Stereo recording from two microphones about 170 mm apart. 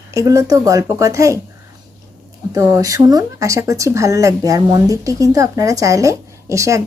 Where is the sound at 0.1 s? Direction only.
20° right (ahead or behind).